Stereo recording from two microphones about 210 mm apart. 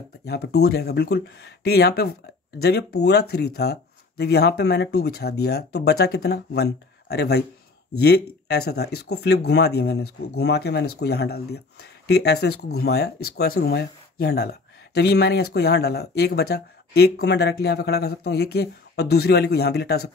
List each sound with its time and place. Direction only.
0.2 s speech: 50° left (ahead or behind)